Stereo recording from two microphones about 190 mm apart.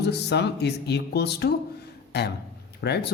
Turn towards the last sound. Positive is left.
turn(degrees=60)  # may be behind; listen again after turning